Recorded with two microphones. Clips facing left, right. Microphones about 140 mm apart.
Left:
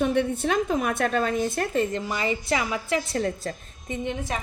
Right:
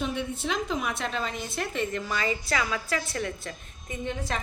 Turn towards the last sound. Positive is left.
turn(degrees=10)  # may be behind; listen again after turning